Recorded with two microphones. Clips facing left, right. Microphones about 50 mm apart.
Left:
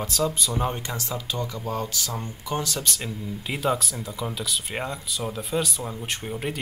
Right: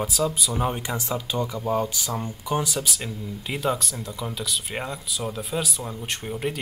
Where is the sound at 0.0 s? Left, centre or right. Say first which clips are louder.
Right 1 dB; centre.